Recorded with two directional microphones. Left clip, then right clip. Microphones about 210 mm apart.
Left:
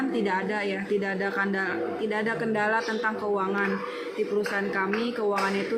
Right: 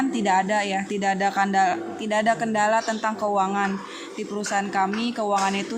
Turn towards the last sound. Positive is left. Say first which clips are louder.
# right 4 dB
turn(degrees=-55)  # may be behind; listen again after turning